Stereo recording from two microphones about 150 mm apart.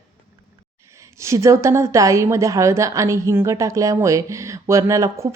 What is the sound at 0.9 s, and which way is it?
A woman's voice, 20° right (ahead or behind).